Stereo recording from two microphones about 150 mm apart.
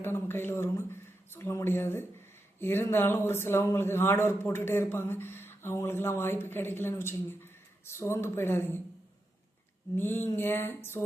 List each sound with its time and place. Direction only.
0.0 s speech: 15° left (ahead or behind)
9.9 s speech: 15° left (ahead or behind)